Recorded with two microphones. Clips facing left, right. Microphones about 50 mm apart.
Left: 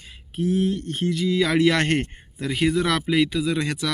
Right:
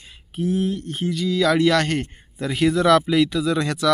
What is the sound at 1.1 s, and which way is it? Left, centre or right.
Speech, left.